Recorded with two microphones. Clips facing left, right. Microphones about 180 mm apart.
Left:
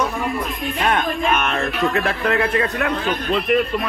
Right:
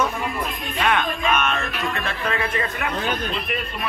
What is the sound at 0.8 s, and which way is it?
Music, 45° left (ahead or behind).